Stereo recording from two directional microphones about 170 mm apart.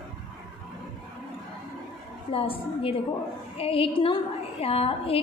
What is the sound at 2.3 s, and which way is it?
A woman's voice, 35° left (ahead or behind).